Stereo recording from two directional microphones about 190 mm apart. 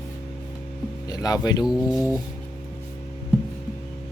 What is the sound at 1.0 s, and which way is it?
Speech, 20° left (ahead or behind).